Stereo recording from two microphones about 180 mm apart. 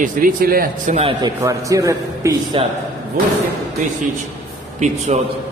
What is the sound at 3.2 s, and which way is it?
Speech, 55° right (ahead or behind).